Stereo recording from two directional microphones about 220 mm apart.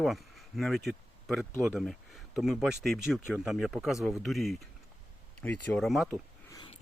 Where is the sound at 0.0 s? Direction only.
Centre (ahead or behind).